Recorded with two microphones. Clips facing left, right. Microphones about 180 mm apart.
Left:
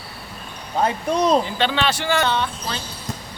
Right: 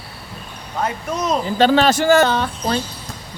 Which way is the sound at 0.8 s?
30° left (ahead or behind).